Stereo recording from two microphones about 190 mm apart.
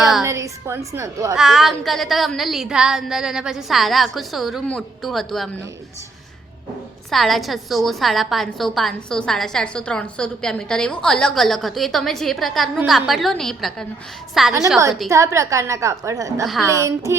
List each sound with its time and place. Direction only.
0.2 s a woman's voice: 15° right (ahead or behind)
1.4 s a woman's voice: centre (ahead or behind)
7.1 s a woman's voice: centre (ahead or behind)
15.1 s a woman's voice: 15° right (ahead or behind)